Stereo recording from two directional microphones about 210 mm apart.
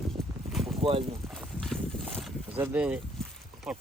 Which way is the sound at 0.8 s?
25° right (ahead or behind).